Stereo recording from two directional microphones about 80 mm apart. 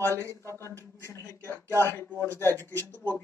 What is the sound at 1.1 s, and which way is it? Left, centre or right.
A man's voice, left.